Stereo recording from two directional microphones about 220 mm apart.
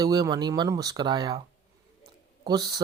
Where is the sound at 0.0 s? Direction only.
15° right (ahead or behind).